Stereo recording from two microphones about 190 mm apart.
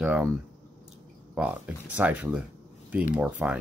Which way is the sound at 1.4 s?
5° right (ahead or behind).